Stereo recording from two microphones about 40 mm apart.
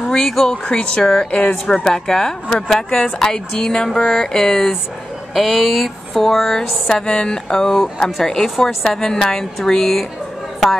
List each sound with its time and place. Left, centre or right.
0.1 s speech: centre
0.5 s speech: left
5.3 s speech: centre
6.2 s speech: centre